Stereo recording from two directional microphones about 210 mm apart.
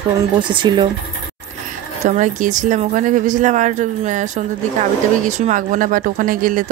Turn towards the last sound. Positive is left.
turn(degrees=-40)  # may be behind; listen again after turning